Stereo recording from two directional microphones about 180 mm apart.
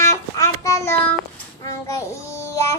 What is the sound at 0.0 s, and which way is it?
Child singing, 20° left (ahead or behind).